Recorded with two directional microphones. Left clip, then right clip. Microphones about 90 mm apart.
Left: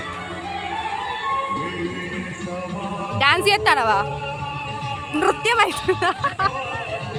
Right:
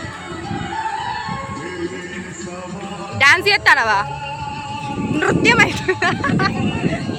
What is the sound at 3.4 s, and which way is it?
Speech, 35° left (ahead or behind).